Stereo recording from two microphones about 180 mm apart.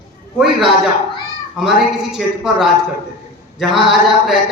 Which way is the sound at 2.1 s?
Centre (ahead or behind).